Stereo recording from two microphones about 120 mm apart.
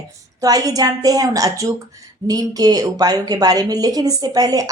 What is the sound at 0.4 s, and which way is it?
A woman's voice, 30° right (ahead or behind).